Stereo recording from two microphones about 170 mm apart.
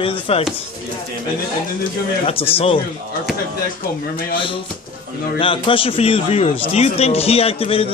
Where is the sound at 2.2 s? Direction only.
35° left (ahead or behind).